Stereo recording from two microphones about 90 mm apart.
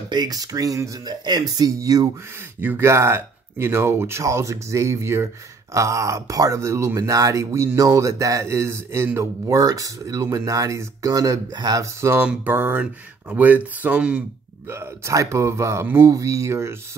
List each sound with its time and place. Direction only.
0.1 s speech: 45° right (ahead or behind)
1.0 s speech: 50° right (ahead or behind)
2.8 s speech: 30° right (ahead or behind); by 11.8 s 45° right (ahead or behind)
11.8 s speech: 30° right (ahead or behind)
12.2 s a sound: 20° right (ahead or behind)
13.3 s speech: 20° right (ahead or behind)
14.7 s speech: 30° right (ahead or behind)